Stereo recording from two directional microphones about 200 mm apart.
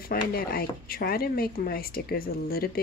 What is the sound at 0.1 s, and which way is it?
Speech, 50° left (ahead or behind).